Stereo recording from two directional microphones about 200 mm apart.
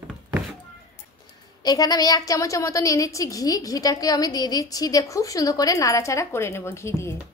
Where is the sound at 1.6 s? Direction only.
20° left (ahead or behind).